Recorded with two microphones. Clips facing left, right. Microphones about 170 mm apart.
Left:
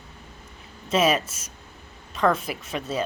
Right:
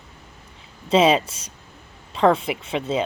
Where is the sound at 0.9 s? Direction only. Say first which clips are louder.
Right 5 dB; 30° right (ahead or behind).